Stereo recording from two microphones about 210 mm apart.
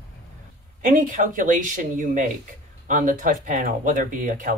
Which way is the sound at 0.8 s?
40° right (ahead or behind).